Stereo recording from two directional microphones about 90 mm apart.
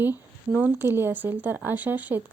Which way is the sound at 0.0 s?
20° right (ahead or behind).